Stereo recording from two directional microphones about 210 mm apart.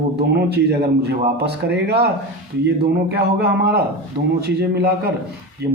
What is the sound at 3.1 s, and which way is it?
Speech, 50° right (ahead or behind).